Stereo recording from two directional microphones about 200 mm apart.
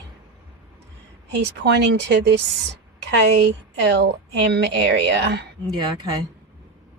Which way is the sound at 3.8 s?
55° right (ahead or behind).